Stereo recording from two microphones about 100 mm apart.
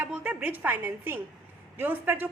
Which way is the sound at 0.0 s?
15° right (ahead or behind).